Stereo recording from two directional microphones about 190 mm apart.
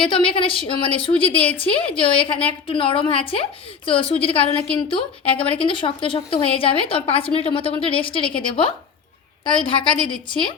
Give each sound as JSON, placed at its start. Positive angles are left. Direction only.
{"t": 0.0, "sound": "a woman's voice", "side_deg": 30}